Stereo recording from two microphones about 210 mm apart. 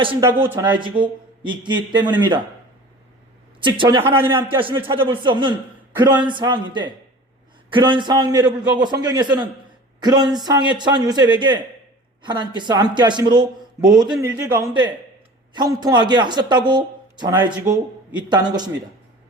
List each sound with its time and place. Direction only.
0.0 s speech: 25° right (ahead or behind)
3.6 s speech: 20° right (ahead or behind)
4.4 s a man's voice: 10° right (ahead or behind)
4.9 s a man's voice: 25° right (ahead or behind)